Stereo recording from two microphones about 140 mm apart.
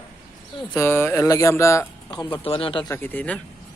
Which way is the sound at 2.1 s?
35° left (ahead or behind).